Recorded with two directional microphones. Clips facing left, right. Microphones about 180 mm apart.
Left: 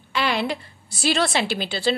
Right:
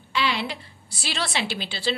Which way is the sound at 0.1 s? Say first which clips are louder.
Left 3 dB; 50° left (ahead or behind).